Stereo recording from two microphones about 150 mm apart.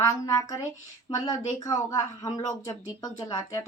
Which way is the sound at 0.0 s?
25° left (ahead or behind).